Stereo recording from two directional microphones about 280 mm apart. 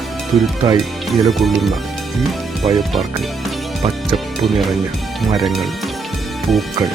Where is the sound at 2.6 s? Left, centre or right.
Centre.